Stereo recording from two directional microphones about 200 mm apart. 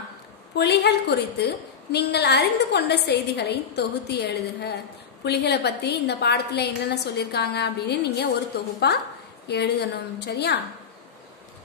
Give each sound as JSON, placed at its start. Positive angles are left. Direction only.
{"t": 0.6, "sound": "a woman's voice", "side_deg": 55}